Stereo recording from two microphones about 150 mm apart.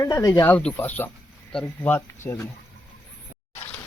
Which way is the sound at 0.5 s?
10° left (ahead or behind).